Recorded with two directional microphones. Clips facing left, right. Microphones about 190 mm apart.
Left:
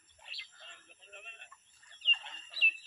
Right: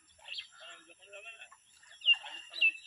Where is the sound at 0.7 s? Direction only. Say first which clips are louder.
Right 4 dB; 50° right (ahead or behind).